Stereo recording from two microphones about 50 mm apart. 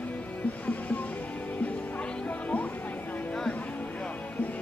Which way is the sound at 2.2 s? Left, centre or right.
Left.